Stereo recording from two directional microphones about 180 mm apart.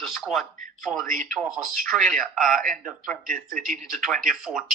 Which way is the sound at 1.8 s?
5° left (ahead or behind).